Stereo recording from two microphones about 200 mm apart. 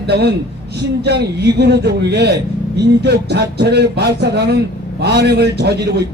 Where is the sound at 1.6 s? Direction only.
55° right (ahead or behind).